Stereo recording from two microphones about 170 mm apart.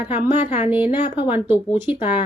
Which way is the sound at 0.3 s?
35° left (ahead or behind).